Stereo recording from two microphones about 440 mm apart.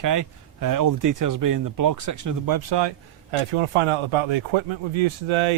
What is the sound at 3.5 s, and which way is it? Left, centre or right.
Speech, right.